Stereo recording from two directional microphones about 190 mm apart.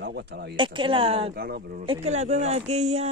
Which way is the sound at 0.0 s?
60° right (ahead or behind).